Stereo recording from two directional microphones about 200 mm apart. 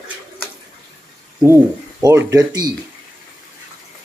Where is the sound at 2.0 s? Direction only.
15° right (ahead or behind).